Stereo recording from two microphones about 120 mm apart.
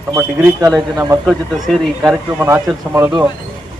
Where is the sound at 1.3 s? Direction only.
Centre (ahead or behind).